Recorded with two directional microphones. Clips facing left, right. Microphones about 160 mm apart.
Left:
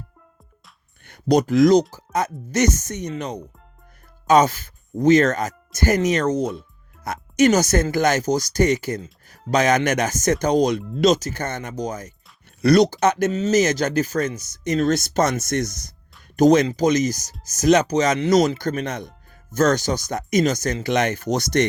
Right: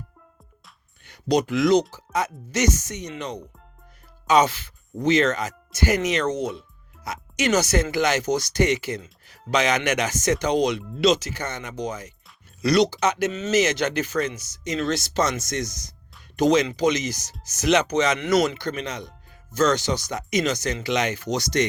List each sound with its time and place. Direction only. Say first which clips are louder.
1.0 s speech: left 4 dB; 50° left (ahead or behind)
16.3 s speech: left 4 dB; 45° left (ahead or behind)